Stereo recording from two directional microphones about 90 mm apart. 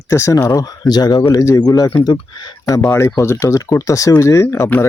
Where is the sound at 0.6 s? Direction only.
45° left (ahead or behind).